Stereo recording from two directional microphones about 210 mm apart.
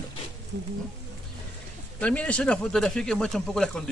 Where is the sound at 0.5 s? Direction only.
50° right (ahead or behind).